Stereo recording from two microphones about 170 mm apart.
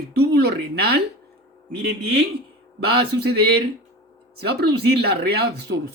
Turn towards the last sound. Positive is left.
turn(degrees=-70)  # may be behind; listen again after turning